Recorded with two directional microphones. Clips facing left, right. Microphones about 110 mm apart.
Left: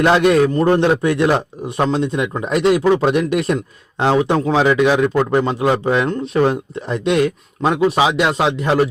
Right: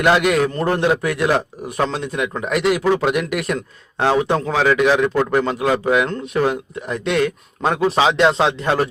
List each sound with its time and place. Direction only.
0.0 s speech: 30° left (ahead or behind)
7.0 s speech: 15° left (ahead or behind)